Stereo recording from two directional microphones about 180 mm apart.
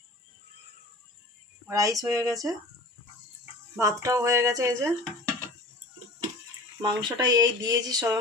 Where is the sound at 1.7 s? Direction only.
20° right (ahead or behind).